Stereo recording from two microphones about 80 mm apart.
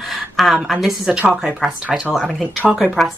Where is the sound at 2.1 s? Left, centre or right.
Centre.